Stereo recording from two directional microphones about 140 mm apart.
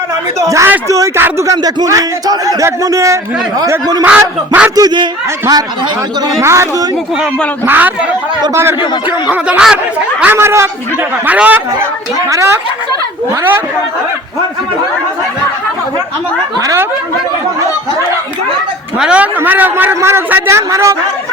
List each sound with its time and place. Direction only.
0.3 s speech: 20° right (ahead or behind)
4.2 s a man's voice: 10° right (ahead or behind)
4.7 s speech: 25° right (ahead or behind)
6.2 s a man's voice: 20° right (ahead or behind)
9.3 s a man's voice: 5° right (ahead or behind)
16.6 s speech: 25° right (ahead or behind)
18.9 s a man's voice: 5° right (ahead or behind)